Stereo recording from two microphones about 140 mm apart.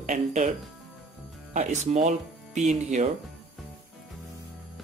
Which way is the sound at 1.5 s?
55° right (ahead or behind).